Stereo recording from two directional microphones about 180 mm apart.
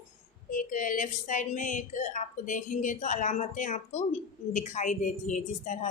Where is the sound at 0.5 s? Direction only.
50° left (ahead or behind).